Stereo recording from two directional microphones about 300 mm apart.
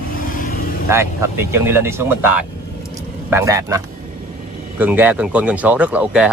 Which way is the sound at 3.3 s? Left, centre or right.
Centre.